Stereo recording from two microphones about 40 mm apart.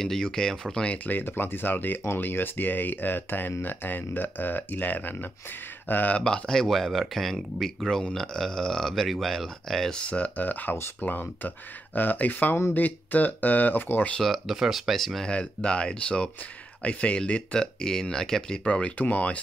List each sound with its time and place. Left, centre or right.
0.0 s speech: centre
0.8 s speech: left
1.2 s speech: left
6.2 s speech: left
9.9 s speech: left
14.2 s speech: centre
15.2 s speech: left
17.6 s speech: centre
18.6 s speech: left